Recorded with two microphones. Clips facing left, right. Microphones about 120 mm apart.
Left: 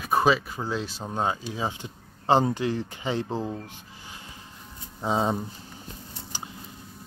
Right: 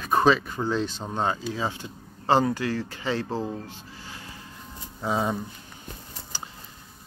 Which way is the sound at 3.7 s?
20° left (ahead or behind).